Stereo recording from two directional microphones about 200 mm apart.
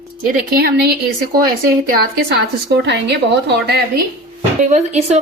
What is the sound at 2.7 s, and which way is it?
A woman's voice, 60° right (ahead or behind).